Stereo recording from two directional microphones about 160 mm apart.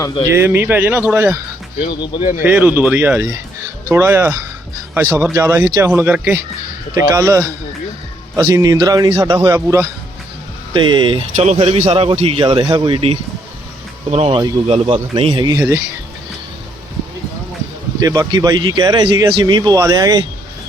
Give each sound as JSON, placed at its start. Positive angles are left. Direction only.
{"t": 0.3, "sound": "speech", "side_deg": -15}
{"t": 1.9, "sound": "speech", "side_deg": 25}
{"t": 2.4, "sound": "speech", "side_deg": -10}
{"t": 10.8, "sound": "a man's voice", "side_deg": -30}
{"t": 18.0, "sound": "speech", "side_deg": -20}